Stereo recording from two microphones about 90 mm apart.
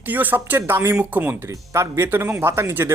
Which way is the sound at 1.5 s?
30° right (ahead or behind).